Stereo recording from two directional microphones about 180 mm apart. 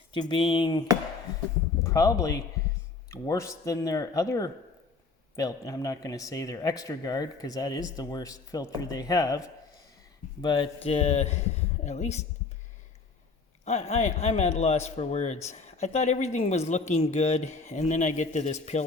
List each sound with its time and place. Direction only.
0.1 s speech: 25° left (ahead or behind)
10.4 s speech: 25° left (ahead or behind)
13.7 s speech: 35° left (ahead or behind)